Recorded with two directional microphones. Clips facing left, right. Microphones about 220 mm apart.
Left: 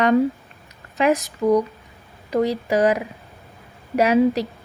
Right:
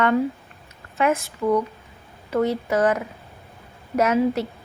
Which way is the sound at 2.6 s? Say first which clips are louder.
Left 2 dB; 15° left (ahead or behind).